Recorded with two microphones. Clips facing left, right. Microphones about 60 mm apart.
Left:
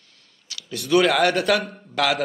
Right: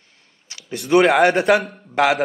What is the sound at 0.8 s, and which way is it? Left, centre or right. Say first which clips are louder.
Speech: right 4 dB; right.